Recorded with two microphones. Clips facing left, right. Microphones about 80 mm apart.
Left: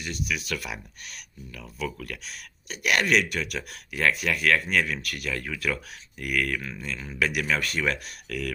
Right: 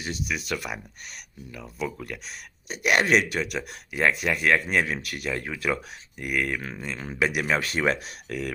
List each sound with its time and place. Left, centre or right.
0.0 s speech: right
6.6 s speech: right